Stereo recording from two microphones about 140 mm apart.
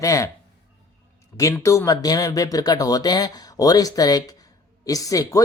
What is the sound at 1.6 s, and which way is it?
Speech, 20° left (ahead or behind).